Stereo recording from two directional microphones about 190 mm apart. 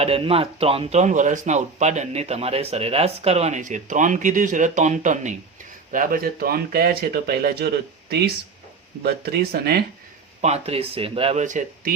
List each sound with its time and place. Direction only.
0.0 s speech: 30° right (ahead or behind); by 7.7 s 55° right (ahead or behind)
9.0 s speech: 55° right (ahead or behind)
10.4 s speech: 35° right (ahead or behind)